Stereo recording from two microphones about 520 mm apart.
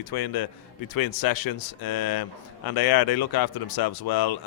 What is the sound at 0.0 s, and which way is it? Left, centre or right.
A man's voice, left.